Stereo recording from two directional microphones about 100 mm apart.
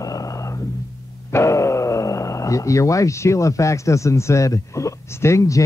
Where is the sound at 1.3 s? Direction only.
30° left (ahead or behind).